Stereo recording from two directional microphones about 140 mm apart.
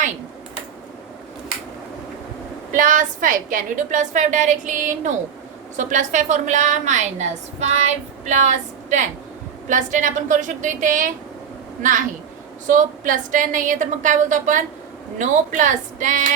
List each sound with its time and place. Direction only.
2.7 s a woman's voice: 65° right (ahead or behind)